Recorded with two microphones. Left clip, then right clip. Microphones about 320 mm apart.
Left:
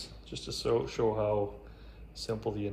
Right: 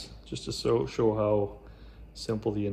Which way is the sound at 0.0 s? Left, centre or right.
Right.